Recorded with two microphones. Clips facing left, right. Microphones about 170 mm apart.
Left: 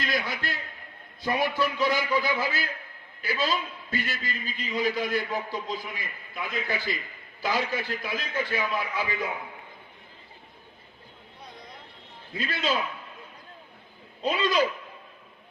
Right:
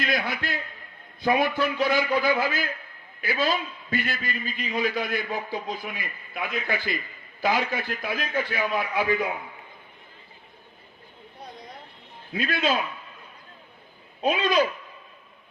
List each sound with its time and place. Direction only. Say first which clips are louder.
0.0 s a man's voice: right 3 dB; 60° right (ahead or behind)
12.4 s a man's voice: right 4 dB; 55° right (ahead or behind)
14.2 s a man's voice: right 2 dB; 55° right (ahead or behind)